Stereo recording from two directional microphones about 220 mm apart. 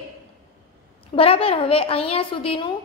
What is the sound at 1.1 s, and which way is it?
A woman's voice, 25° left (ahead or behind).